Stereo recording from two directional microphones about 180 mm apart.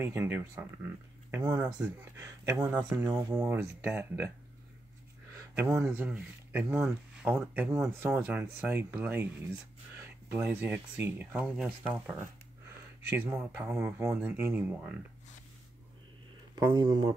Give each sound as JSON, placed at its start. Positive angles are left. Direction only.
{"t": 0.0, "sound": "speech", "side_deg": -15}
{"t": 5.5, "sound": "speech", "side_deg": -15}
{"t": 13.3, "sound": "speech", "side_deg": -15}
{"t": 16.5, "sound": "speech", "side_deg": -25}